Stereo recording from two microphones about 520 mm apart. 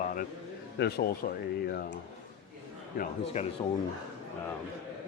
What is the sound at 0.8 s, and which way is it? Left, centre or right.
Speech, centre.